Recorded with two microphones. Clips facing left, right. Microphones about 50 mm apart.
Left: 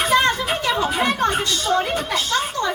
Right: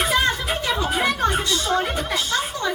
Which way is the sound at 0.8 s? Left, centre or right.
Left.